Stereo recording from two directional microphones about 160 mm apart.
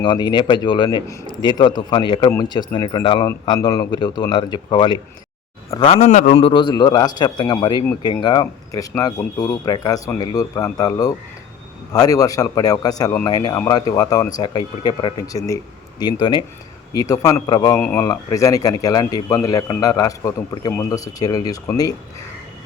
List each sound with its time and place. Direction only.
0.0 s a man's voice: 30° left (ahead or behind)
5.9 s a man's voice: 50° left (ahead or behind); by 17.7 s 25° left (ahead or behind)
17.7 s a man's voice: 10° left (ahead or behind)